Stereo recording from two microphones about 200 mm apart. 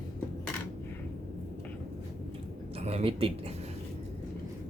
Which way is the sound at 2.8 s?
30° right (ahead or behind).